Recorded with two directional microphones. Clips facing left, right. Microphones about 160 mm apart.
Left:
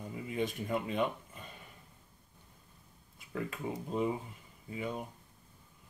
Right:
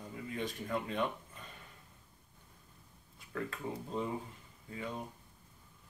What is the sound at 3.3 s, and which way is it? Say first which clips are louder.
Speech: left 2 dB; 15° left (ahead or behind).